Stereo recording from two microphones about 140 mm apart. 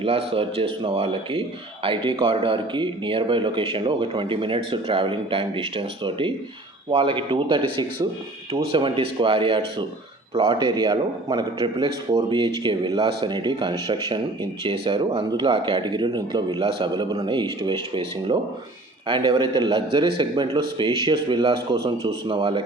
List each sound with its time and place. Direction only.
0.0 s a man's voice: 45° right (ahead or behind)